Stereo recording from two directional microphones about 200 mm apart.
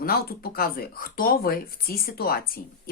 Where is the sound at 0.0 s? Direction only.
50° left (ahead or behind).